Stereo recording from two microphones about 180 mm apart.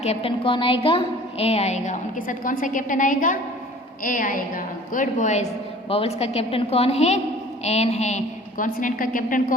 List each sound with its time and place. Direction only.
0.0 s a woman's voice: 35° left (ahead or behind); by 9.6 s 50° left (ahead or behind)